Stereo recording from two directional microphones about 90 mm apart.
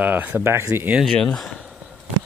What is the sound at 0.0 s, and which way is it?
Speech, 20° right (ahead or behind).